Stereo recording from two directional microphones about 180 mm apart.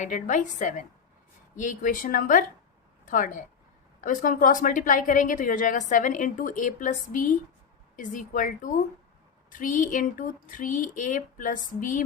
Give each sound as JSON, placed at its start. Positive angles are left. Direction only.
{"t": 0.0, "sound": "speech", "side_deg": 45}